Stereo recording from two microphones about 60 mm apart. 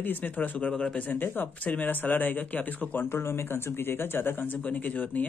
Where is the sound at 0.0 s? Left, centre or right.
Left.